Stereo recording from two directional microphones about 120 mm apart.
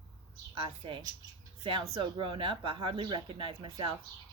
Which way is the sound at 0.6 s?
50° right (ahead or behind).